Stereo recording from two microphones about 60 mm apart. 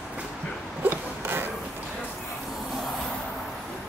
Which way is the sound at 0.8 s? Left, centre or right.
Right.